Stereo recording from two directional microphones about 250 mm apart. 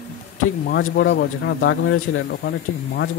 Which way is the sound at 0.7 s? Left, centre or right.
Left.